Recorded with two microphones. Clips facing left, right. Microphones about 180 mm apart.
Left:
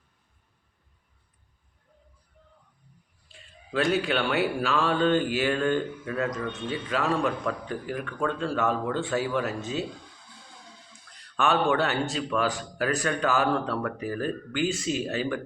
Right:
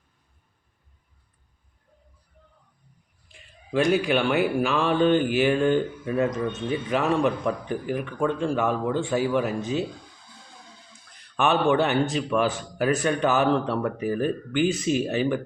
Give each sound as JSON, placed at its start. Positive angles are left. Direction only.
{"t": 4.0, "sound": "a man's voice", "side_deg": -15}
{"t": 11.3, "sound": "a man's voice", "side_deg": -20}